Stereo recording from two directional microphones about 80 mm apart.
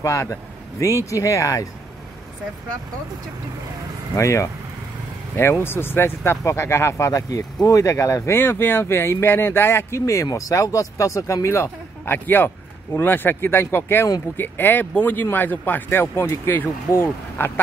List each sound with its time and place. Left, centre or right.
0.0 s speech: left
4.1 s speech: left